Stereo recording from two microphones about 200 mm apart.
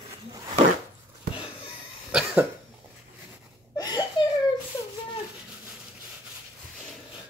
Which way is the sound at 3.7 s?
20° left (ahead or behind).